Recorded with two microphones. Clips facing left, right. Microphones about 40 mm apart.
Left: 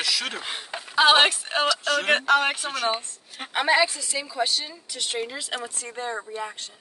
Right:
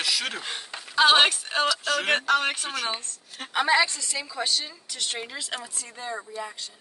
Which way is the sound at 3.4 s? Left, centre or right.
Centre.